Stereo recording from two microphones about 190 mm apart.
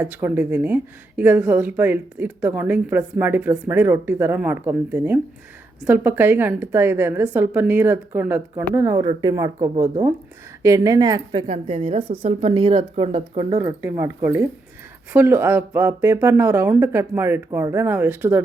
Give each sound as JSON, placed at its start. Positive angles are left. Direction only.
{"t": 0.0, "sound": "a woman's voice", "side_deg": -10}
{"t": 10.6, "sound": "a woman's voice", "side_deg": -15}
{"t": 13.6, "sound": "speech", "side_deg": -20}